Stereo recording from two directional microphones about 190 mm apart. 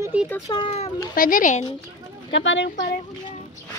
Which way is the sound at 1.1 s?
45° left (ahead or behind).